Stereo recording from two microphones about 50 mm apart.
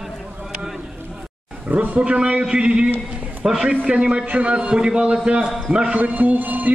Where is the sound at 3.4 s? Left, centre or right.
Centre; by 4.6 s right.